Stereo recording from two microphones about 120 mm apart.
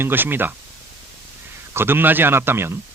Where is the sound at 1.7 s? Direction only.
20° right (ahead or behind).